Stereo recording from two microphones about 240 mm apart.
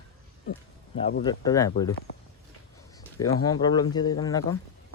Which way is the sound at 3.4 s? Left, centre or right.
Centre.